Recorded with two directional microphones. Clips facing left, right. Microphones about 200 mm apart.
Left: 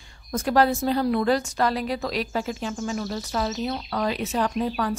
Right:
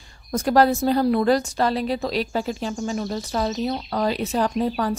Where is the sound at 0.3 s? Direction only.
40° right (ahead or behind).